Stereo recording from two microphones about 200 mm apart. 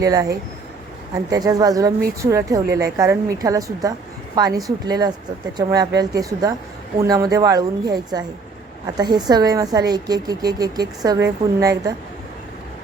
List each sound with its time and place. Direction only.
0.0 s a woman's voice: 15° right (ahead or behind)